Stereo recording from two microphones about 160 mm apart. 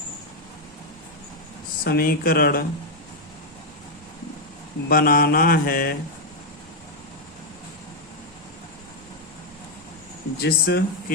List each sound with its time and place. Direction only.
1.8 s speech: 70° left (ahead or behind)
4.9 s mantra: 65° left (ahead or behind)
10.4 s speech: 90° left